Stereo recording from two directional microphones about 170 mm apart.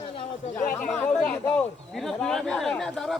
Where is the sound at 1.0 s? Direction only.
5° left (ahead or behind).